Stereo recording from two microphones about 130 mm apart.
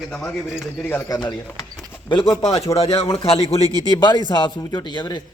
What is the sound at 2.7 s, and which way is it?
Speech, 50° left (ahead or behind).